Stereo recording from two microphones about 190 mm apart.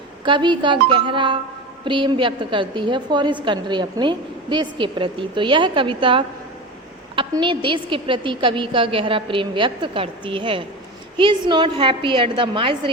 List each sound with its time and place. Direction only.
0.3 s a woman's voice: 25° right (ahead or behind)